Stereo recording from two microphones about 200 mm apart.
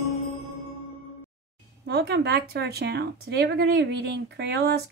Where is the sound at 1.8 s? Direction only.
55° right (ahead or behind).